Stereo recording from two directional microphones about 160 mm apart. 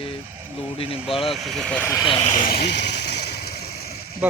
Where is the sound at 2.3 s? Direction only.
75° left (ahead or behind).